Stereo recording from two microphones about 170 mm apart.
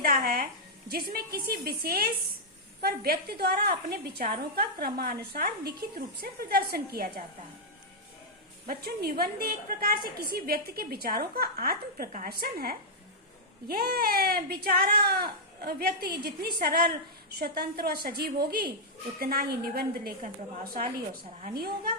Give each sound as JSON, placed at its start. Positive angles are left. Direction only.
{"t": 0.0, "sound": "music", "side_deg": -60}
{"t": 0.9, "sound": "a woman's voice", "side_deg": -65}
{"t": 8.6, "sound": "a woman's voice", "side_deg": -65}